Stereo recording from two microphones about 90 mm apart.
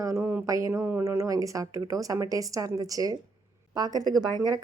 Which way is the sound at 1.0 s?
35° right (ahead or behind).